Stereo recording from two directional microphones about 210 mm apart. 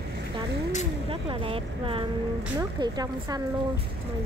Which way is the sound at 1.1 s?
25° right (ahead or behind).